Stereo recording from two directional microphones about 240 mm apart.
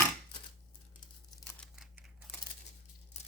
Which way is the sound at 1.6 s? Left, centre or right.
Centre.